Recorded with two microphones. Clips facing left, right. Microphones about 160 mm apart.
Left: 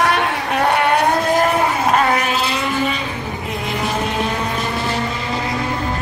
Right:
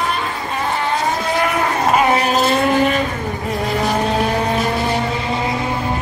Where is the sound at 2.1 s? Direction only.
40° right (ahead or behind).